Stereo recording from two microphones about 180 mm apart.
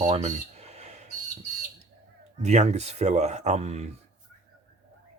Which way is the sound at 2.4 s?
40° right (ahead or behind).